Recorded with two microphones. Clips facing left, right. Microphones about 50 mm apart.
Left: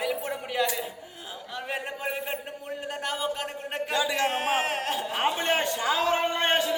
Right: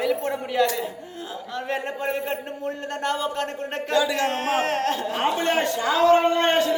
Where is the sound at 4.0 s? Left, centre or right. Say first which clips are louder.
Right 3 dB; centre.